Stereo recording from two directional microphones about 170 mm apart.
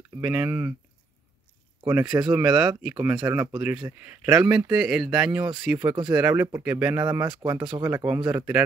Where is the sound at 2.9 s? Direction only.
15° right (ahead or behind).